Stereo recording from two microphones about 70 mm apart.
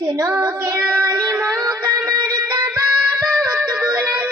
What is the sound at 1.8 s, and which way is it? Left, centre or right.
Music, right.